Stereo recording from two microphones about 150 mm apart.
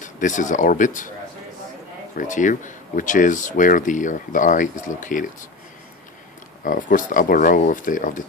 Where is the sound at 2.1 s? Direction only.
60° left (ahead or behind).